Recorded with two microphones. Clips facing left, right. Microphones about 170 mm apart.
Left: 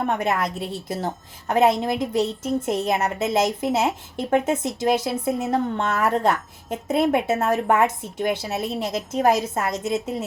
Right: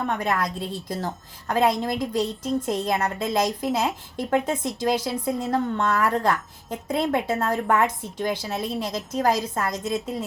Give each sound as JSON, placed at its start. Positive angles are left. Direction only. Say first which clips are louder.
{"t": 0.0, "sound": "a woman's voice", "louder": "left 2 dB", "side_deg": 20}